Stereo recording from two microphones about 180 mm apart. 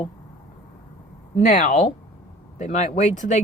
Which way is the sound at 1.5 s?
45° left (ahead or behind).